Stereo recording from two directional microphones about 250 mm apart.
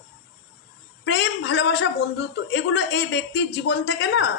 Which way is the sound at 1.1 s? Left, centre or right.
Left.